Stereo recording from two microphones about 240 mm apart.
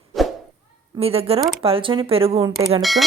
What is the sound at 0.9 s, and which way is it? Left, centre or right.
A woman's voice, right.